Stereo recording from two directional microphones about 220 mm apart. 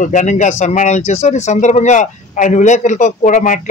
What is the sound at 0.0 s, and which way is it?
Speech, 35° left (ahead or behind).